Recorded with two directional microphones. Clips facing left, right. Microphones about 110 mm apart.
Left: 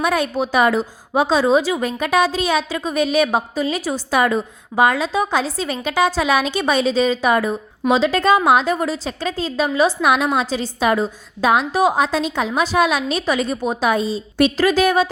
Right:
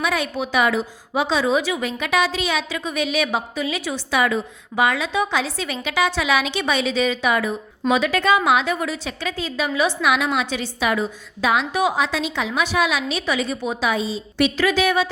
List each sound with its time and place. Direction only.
0.0 s a woman's voice: 45° left (ahead or behind)
7.9 s a woman's voice: 30° left (ahead or behind)